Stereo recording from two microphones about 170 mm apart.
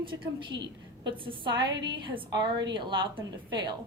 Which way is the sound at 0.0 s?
30° right (ahead or behind).